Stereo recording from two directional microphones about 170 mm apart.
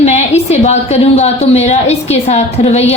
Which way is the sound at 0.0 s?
40° left (ahead or behind).